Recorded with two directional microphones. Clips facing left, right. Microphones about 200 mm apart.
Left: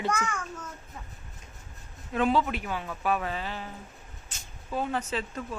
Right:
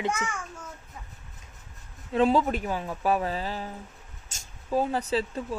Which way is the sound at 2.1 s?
30° right (ahead or behind).